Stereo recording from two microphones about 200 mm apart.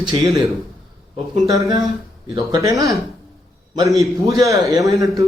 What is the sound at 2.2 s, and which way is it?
Speech, 20° right (ahead or behind).